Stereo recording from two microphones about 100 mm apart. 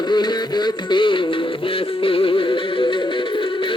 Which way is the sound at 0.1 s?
45° left (ahead or behind).